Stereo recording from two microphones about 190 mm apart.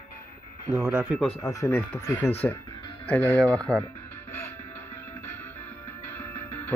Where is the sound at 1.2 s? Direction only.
5° left (ahead or behind).